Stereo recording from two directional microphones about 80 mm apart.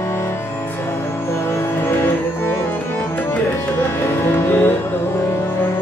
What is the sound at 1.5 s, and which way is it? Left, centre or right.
Music, left.